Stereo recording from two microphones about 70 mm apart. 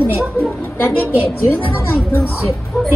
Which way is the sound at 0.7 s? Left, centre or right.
Left.